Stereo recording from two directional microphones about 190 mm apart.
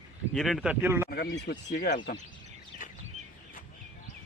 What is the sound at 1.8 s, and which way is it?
Speech, 50° left (ahead or behind).